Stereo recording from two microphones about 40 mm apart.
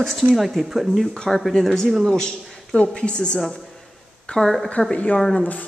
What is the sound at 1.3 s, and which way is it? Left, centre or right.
A man's voice, centre.